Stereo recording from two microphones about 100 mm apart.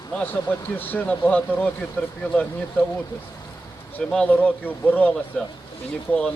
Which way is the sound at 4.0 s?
10° left (ahead or behind).